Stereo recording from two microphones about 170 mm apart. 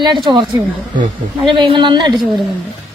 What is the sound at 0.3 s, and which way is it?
A woman's voice, 30° right (ahead or behind).